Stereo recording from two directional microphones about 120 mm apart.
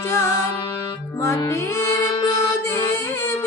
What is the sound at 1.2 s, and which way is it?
Mantra, 25° left (ahead or behind).